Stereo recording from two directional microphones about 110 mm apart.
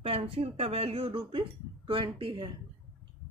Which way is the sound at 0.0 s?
60° right (ahead or behind).